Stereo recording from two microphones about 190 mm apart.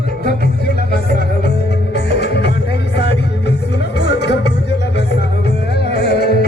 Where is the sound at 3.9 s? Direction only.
65° left (ahead or behind).